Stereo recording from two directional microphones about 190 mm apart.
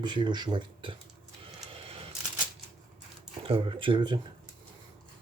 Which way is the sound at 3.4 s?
30° right (ahead or behind).